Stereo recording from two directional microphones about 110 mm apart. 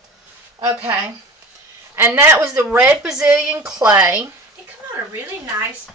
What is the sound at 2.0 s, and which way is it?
A woman's voice, 20° right (ahead or behind).